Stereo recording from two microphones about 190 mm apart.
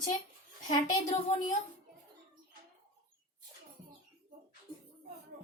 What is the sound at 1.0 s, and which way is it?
Speech, 35° left (ahead or behind).